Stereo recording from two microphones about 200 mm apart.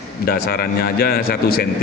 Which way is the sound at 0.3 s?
50° left (ahead or behind).